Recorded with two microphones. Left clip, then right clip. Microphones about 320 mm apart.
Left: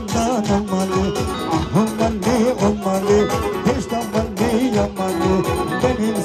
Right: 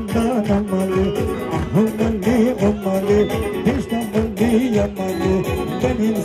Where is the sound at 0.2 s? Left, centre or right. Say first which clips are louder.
Left 1 dB; left.